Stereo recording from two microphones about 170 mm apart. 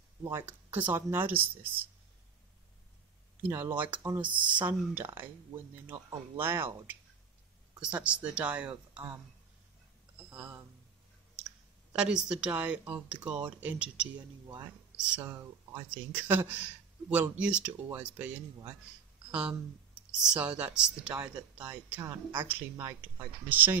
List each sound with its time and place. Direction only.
0.2 s speech: 15° right (ahead or behind)
3.4 s speech: 10° right (ahead or behind)
10.3 s speech: 10° right (ahead or behind)
11.9 s speech: 5° right (ahead or behind)
15.2 s speech: 25° right (ahead or behind)
16.1 s speech: 10° right (ahead or behind)
20.1 s speech: 10° right (ahead or behind)